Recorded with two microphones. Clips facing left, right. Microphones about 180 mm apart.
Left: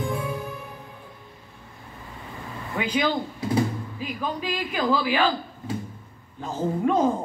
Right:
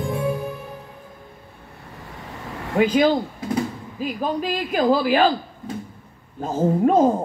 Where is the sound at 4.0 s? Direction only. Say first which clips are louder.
Right 7 dB; 45° right (ahead or behind).